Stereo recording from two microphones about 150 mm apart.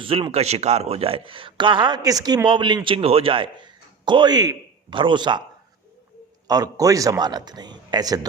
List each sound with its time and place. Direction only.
0.0 s a man's voice: 40° right (ahead or behind)
6.5 s a man's voice: 25° right (ahead or behind)